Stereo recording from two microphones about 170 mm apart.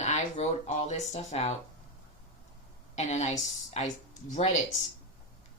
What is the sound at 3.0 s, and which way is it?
Speech, 45° left (ahead or behind).